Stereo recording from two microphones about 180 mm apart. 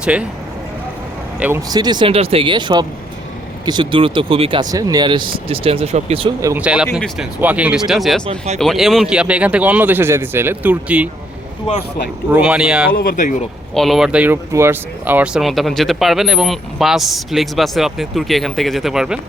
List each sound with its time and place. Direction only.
0.0 s speech: 5° right (ahead or behind)
1.4 s speech: 10° right (ahead or behind)
1.7 s speech: 25° right (ahead or behind)
4.7 s speech: 20° right (ahead or behind); by 6.2 s 35° right (ahead or behind)
6.4 s speech: 10° right (ahead or behind)
12.3 s speech: 5° right (ahead or behind)
12.9 s speech: 55° left (ahead or behind)
13.7 s speech: centre (ahead or behind)